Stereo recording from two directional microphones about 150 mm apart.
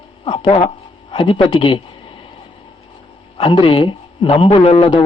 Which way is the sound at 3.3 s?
35° left (ahead or behind).